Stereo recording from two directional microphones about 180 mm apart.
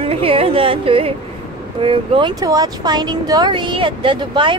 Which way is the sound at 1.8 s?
30° right (ahead or behind).